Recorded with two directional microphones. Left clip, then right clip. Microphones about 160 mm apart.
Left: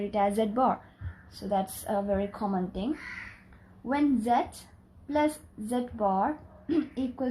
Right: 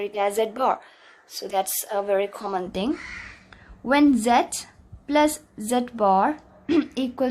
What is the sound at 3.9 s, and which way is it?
A woman's voice, 45° right (ahead or behind).